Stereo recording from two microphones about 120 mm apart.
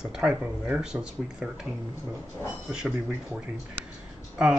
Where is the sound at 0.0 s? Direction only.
5° right (ahead or behind).